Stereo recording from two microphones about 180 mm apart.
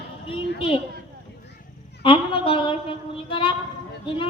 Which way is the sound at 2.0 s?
30° left (ahead or behind).